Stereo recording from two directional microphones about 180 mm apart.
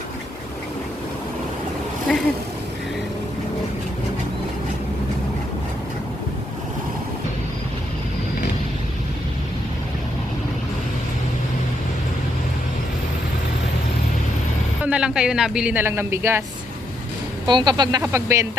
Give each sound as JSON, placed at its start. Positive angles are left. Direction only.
{"t": 2.1, "sound": "speech", "side_deg": 0}
{"t": 14.8, "sound": "speech", "side_deg": -5}
{"t": 17.4, "sound": "speech", "side_deg": -25}